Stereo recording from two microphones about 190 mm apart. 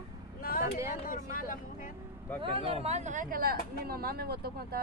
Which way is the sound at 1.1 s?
45° left (ahead or behind).